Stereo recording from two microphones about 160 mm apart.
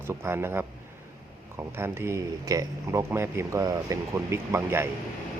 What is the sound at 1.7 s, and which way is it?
Speech, 15° right (ahead or behind).